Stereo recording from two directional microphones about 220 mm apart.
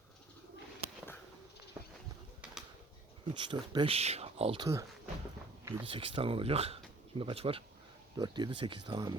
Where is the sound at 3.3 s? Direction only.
20° right (ahead or behind).